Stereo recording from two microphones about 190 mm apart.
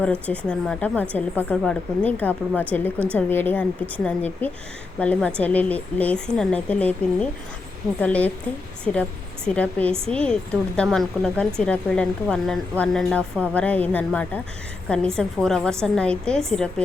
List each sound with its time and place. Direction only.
0.0 s a woman's voice: 5° left (ahead or behind)